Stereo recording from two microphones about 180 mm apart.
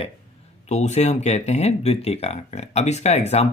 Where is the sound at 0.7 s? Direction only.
40° left (ahead or behind).